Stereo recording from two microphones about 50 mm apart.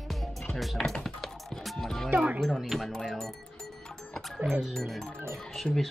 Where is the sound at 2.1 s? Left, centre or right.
Right.